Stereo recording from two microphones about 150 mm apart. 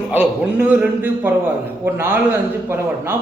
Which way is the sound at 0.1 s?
10° right (ahead or behind).